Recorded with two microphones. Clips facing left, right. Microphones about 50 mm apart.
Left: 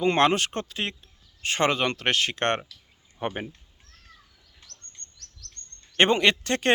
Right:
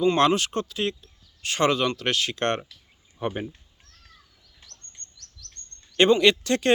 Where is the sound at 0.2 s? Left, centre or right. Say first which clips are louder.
Right 1 dB; left.